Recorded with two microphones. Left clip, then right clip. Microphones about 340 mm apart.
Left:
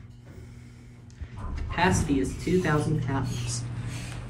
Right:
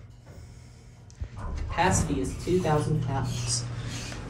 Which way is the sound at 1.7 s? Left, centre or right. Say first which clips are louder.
Left 1 dB; centre.